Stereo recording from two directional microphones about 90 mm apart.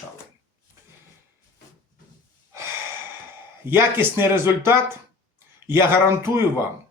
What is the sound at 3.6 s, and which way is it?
Speech, 25° right (ahead or behind).